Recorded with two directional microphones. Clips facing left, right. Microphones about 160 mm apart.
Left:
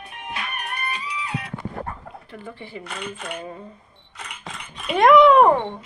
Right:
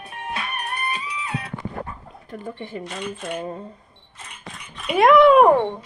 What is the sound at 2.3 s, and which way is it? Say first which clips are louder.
Speech: right 6 dB; 45° right (ahead or behind).